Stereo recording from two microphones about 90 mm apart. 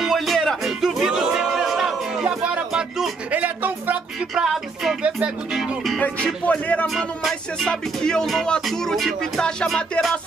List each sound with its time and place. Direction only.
0.0 s music: centre (ahead or behind)
3.3 s a sound: 15° right (ahead or behind)
4.4 s music: 5° right (ahead or behind)
5.0 s music: 15° right (ahead or behind)
5.9 s speech: 15° left (ahead or behind)
7.0 s music: 5° left (ahead or behind)